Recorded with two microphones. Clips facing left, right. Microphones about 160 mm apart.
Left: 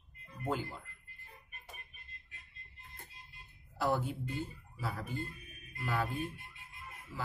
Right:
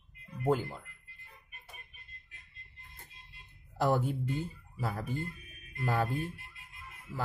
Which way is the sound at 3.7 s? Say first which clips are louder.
Right 4 dB; 45° right (ahead or behind).